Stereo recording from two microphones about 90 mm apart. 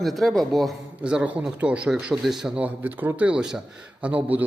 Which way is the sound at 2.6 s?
20° right (ahead or behind).